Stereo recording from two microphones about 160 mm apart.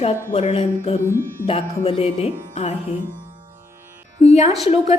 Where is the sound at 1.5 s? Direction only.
40° left (ahead or behind).